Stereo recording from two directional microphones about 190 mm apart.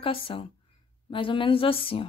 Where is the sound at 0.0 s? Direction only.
30° left (ahead or behind).